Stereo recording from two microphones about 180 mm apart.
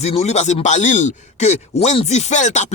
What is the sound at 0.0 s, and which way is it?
Speech, 35° left (ahead or behind).